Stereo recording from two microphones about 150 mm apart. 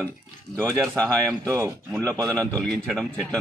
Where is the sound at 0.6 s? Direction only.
10° left (ahead or behind).